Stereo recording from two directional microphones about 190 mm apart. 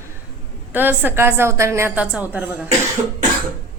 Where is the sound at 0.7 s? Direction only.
10° right (ahead or behind).